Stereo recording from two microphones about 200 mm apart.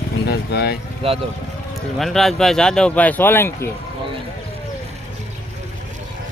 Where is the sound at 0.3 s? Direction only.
55° left (ahead or behind).